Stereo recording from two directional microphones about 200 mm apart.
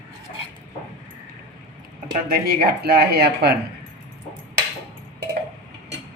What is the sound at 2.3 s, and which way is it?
Speech, 50° right (ahead or behind).